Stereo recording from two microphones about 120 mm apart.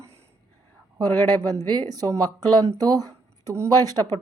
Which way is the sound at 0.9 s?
30° right (ahead or behind).